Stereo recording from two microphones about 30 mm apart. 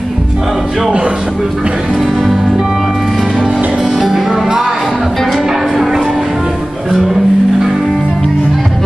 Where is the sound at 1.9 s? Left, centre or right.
Centre.